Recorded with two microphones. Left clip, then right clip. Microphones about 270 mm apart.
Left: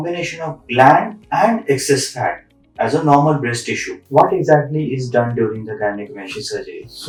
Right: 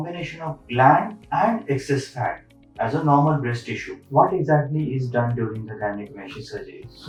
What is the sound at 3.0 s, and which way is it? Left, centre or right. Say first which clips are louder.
Speech: left 6 dB; right.